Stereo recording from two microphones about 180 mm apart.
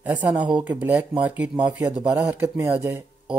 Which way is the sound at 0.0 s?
10° right (ahead or behind).